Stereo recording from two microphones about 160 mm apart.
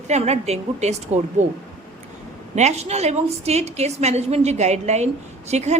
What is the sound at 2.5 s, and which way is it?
A woman's voice, 45° right (ahead or behind).